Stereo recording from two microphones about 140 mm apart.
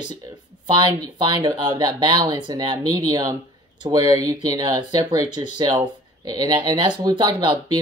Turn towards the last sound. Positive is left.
turn(degrees=-30)  # may be behind; listen again after turning